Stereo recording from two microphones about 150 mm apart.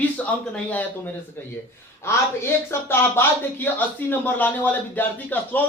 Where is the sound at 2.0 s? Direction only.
15° left (ahead or behind).